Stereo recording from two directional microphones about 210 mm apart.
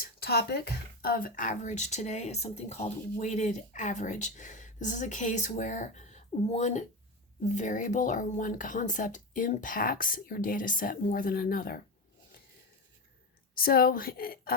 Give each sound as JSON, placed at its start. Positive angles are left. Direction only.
{"t": 0.0, "sound": "a woman's voice", "side_deg": 50}
{"t": 13.6, "sound": "a woman's voice", "side_deg": 45}